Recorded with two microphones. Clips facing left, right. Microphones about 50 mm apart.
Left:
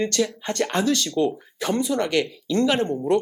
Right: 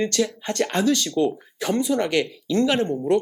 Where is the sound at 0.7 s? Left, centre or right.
Centre.